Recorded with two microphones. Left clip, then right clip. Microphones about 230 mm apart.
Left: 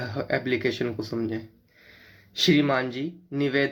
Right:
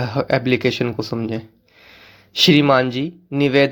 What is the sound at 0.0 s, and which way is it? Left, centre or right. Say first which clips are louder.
Speech: right 8 dB; right.